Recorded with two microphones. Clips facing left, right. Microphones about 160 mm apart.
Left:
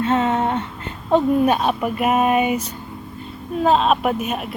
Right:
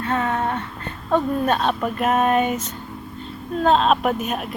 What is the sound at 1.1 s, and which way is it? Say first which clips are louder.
Speech: left 4 dB; 15° left (ahead or behind).